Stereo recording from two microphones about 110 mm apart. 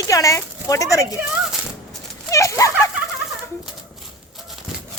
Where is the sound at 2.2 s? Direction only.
30° left (ahead or behind).